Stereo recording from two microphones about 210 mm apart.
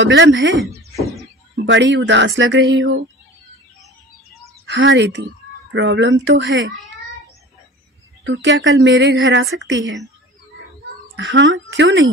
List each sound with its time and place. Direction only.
0.0 s speech: 60° right (ahead or behind)
4.6 s speech: 60° right (ahead or behind)
8.2 s speech: 60° right (ahead or behind)
11.1 s speech: 60° right (ahead or behind)